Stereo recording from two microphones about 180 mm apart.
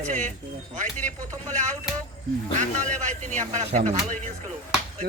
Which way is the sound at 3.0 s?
45° right (ahead or behind).